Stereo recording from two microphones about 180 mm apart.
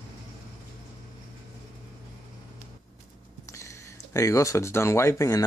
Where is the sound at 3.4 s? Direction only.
15° left (ahead or behind).